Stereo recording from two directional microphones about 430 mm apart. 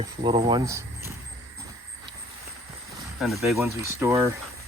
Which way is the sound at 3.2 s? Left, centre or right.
Centre.